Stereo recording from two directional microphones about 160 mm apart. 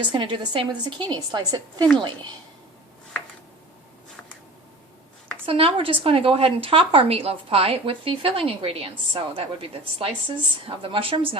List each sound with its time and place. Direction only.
0.1 s a woman's voice: 30° right (ahead or behind)
5.5 s speech: 35° right (ahead or behind)